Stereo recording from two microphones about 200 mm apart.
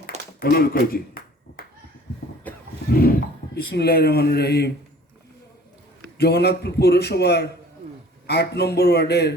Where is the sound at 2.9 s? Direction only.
50° left (ahead or behind).